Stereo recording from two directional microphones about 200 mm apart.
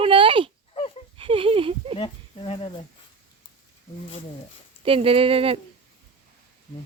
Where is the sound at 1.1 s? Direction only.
25° right (ahead or behind).